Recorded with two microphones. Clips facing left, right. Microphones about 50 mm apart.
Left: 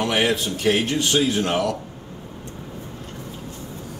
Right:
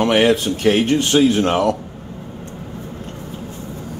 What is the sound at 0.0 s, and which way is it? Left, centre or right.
Speech, right.